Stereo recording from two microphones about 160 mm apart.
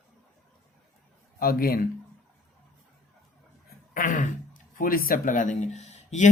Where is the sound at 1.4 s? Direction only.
65° left (ahead or behind).